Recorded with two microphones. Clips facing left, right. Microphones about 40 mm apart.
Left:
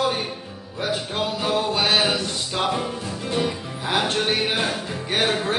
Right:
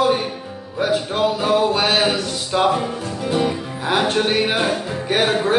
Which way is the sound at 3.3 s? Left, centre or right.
Centre.